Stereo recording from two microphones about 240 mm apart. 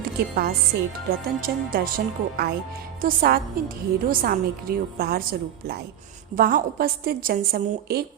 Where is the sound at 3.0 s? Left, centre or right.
Right.